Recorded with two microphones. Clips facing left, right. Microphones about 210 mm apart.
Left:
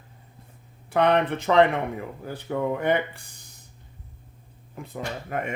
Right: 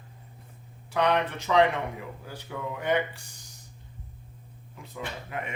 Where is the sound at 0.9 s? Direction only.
55° left (ahead or behind).